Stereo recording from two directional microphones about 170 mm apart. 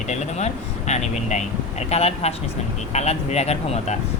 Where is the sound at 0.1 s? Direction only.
40° left (ahead or behind).